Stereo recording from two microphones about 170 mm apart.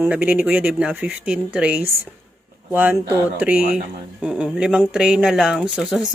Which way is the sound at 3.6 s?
55° right (ahead or behind).